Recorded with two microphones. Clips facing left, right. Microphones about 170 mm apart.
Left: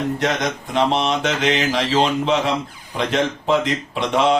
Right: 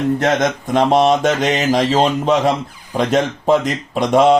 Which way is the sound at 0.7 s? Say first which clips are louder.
Right 6 dB; 45° right (ahead or behind).